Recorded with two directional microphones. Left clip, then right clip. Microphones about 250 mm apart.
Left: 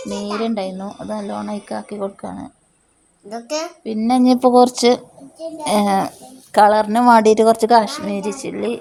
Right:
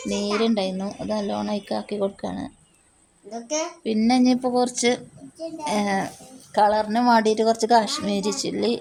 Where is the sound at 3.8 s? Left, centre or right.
Centre.